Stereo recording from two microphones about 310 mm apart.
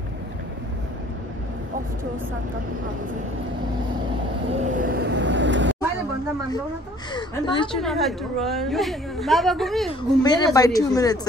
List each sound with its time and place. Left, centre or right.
4.6 s vehicle: right
7.2 s speech: centre
7.7 s a woman's voice: centre
10.2 s speech: centre